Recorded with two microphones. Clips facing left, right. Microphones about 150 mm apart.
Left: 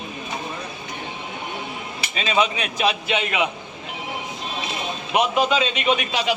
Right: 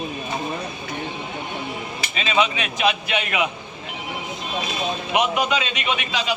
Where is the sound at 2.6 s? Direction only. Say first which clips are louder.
Right 1 dB; 35° left (ahead or behind).